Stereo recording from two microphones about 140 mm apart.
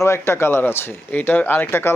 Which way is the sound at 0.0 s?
20° left (ahead or behind).